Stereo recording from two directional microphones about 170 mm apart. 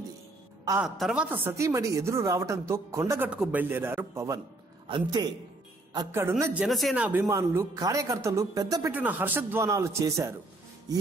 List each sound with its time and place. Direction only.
0.7 s a woman's voice: centre (ahead or behind)
4.8 s a man's voice: 30° right (ahead or behind)
5.9 s a woman's voice: 15° right (ahead or behind)
6.6 s speech: centre (ahead or behind)
7.2 s a man's voice: 20° right (ahead or behind)
8.9 s a woman's voice: 10° right (ahead or behind)